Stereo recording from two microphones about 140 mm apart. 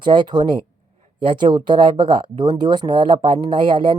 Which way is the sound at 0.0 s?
35° right (ahead or behind).